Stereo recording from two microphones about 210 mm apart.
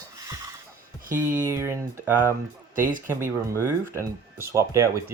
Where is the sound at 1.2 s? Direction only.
15° right (ahead or behind).